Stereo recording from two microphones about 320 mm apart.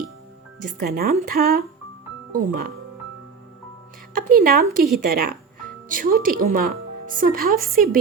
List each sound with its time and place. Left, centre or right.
0.8 s a woman's voice: right
4.1 s speech: right